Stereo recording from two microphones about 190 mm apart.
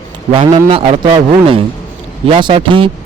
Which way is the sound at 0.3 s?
30° right (ahead or behind).